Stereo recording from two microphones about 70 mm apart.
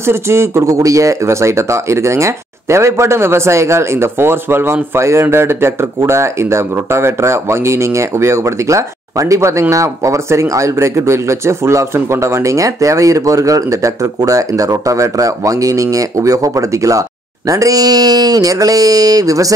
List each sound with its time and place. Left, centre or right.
0.0 s speech: right